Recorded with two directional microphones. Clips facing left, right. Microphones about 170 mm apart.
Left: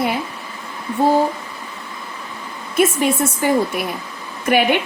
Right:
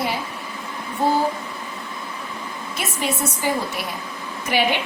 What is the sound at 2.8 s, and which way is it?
Speech, 50° left (ahead or behind).